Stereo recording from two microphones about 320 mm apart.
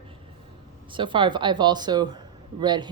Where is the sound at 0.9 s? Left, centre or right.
Centre.